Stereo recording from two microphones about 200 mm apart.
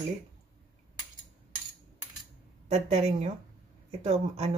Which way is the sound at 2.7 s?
35° right (ahead or behind).